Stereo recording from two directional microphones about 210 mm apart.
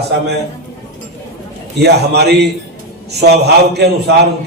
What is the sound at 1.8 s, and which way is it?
A man's voice, 50° right (ahead or behind).